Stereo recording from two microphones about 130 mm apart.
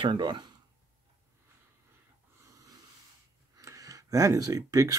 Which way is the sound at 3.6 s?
25° right (ahead or behind).